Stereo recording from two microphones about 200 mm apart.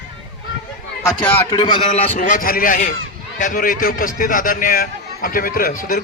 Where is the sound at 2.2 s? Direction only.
40° left (ahead or behind).